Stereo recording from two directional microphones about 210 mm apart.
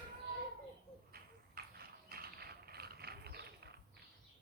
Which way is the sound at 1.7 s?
45° right (ahead or behind).